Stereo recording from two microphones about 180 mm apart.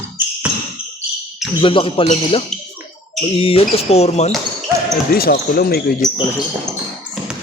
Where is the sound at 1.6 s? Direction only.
30° left (ahead or behind).